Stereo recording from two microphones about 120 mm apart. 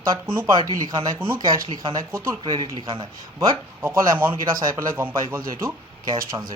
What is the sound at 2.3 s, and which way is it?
Speech, 40° right (ahead or behind).